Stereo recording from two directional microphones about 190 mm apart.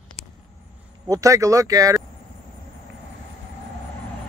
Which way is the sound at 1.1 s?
15° right (ahead or behind).